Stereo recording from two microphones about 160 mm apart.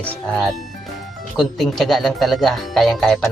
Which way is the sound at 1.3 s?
Centre (ahead or behind).